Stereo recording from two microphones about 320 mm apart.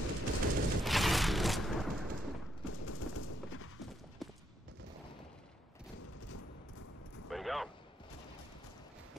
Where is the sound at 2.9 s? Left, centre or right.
Left.